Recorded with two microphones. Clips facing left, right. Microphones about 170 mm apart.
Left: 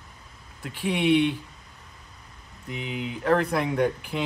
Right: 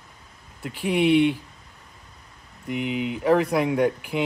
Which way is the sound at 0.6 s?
5° right (ahead or behind).